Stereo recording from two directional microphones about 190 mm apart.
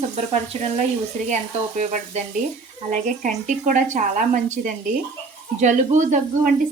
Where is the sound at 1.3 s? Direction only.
40° right (ahead or behind).